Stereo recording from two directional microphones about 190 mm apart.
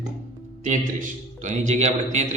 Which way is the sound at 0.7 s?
40° right (ahead or behind).